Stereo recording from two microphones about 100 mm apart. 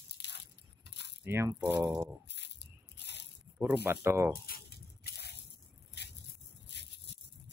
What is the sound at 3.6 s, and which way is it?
Speech, 20° right (ahead or behind).